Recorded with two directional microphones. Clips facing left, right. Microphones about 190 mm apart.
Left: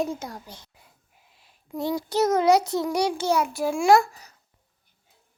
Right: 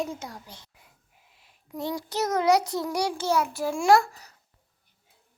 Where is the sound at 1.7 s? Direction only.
30° left (ahead or behind).